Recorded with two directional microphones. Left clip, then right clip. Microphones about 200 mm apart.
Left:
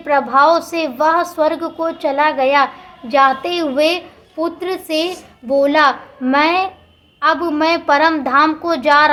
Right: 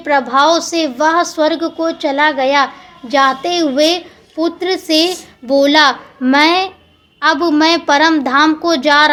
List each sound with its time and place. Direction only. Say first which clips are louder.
0.0 s a woman's voice: right 1 dB; 25° right (ahead or behind)